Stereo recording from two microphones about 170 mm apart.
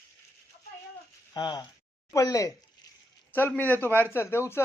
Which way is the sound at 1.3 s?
25° left (ahead or behind).